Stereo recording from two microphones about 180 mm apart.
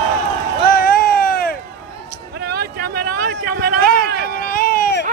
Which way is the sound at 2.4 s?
65° right (ahead or behind).